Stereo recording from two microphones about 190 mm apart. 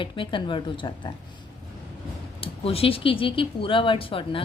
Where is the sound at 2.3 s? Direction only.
30° left (ahead or behind).